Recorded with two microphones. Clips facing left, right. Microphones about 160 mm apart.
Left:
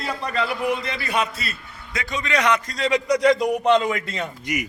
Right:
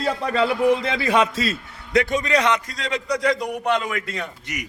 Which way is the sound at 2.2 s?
30° right (ahead or behind).